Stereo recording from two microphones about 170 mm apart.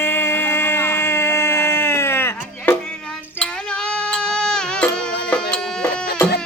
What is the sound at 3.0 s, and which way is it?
Music, 5° left (ahead or behind).